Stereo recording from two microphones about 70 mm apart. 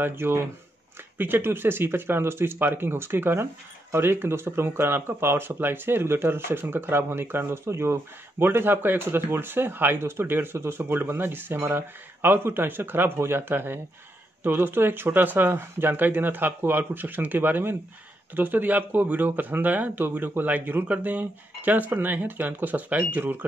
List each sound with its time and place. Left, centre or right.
0.0 s speech: right